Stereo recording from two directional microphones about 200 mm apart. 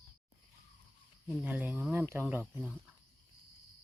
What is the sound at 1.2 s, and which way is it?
Speech, 10° right (ahead or behind).